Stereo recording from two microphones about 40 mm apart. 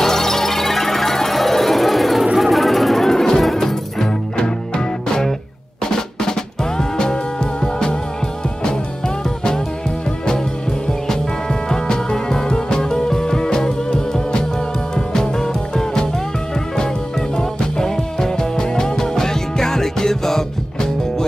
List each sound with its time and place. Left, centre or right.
0.0 s music: centre
4.4 s music: centre
6.8 s music: centre
11.7 s music: centre
17.4 s music: centre